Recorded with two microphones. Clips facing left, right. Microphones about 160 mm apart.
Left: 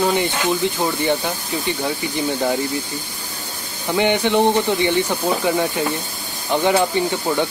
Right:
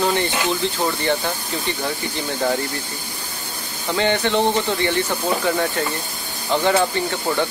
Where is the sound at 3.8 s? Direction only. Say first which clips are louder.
Left 2 dB; 15° left (ahead or behind).